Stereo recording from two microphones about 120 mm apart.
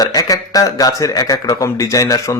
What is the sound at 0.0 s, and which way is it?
A man's voice, 30° left (ahead or behind).